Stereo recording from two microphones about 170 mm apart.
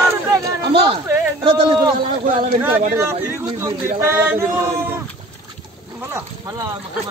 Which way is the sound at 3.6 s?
15° right (ahead or behind).